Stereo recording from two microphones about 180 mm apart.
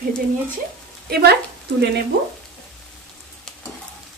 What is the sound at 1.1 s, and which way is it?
Speech, 60° right (ahead or behind).